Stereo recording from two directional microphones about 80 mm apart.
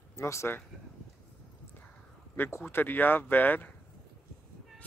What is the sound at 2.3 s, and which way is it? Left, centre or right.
Speech, left.